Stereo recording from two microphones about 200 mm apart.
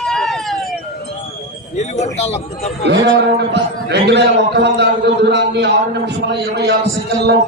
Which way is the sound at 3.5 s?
60° right (ahead or behind).